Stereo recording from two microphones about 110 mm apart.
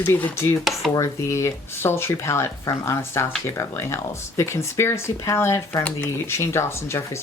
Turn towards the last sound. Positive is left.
turn(degrees=25)  # may be behind; listen again after turning